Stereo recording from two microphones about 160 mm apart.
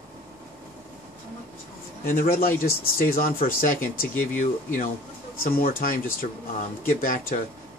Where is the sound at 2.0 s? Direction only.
60° left (ahead or behind).